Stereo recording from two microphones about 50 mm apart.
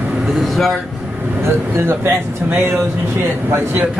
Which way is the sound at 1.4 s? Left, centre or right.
Right.